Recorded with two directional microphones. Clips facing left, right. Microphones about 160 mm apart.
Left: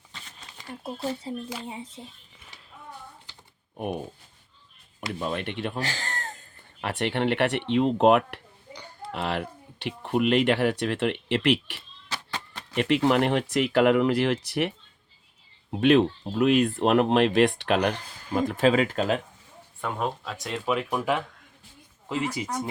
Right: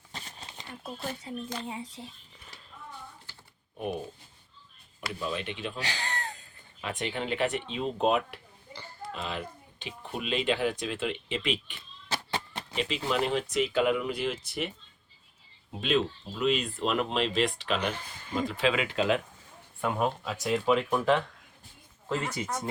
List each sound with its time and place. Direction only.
0.1 s a sound: 35° right (ahead or behind)
1.3 s speech: 30° left (ahead or behind)
5.2 s speech: 60° left (ahead or behind)
6.8 s speech: 65° left (ahead or behind)
8.7 s a sound: 5° right (ahead or behind)
9.1 s speech: 70° left (ahead or behind)
12.0 s a sound: 30° right (ahead or behind)
12.7 s speech: 60° left (ahead or behind); by 14.7 s 75° left (ahead or behind)
15.8 s speech: 65° left (ahead or behind); by 19.2 s 40° left (ahead or behind)
19.8 s speech: 5° right (ahead or behind); by 22.7 s 15° left (ahead or behind)